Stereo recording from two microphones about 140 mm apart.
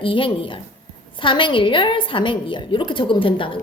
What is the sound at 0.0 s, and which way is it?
A woman's voice, 35° left (ahead or behind).